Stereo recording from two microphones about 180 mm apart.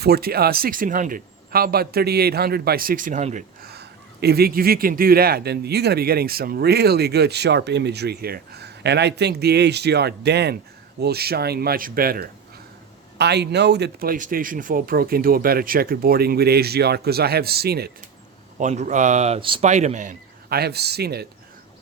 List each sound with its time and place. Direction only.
0.0 s speech: 60° right (ahead or behind); by 3.4 s 40° right (ahead or behind)
3.6 s speech: 65° right (ahead or behind)
13.1 s speech: 65° right (ahead or behind)
18.5 s speech: 40° right (ahead or behind); by 21.2 s 65° right (ahead or behind)